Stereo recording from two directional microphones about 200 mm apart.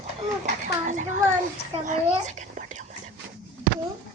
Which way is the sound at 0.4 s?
40° right (ahead or behind).